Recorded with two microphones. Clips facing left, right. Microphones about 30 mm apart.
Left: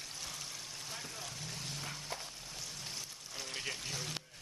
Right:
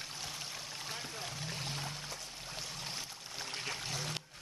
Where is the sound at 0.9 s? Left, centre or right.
Centre.